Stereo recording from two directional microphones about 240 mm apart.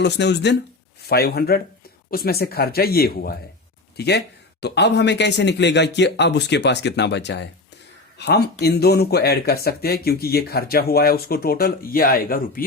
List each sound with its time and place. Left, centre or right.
0.0 s speech: left